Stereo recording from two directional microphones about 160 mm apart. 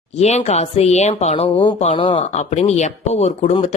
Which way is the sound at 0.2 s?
45° left (ahead or behind).